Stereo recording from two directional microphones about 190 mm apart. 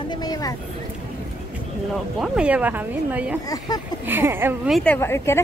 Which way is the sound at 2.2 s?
5° right (ahead or behind).